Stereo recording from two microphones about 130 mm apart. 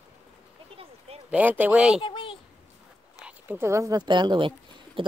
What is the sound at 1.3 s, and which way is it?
Speech, 10° right (ahead or behind).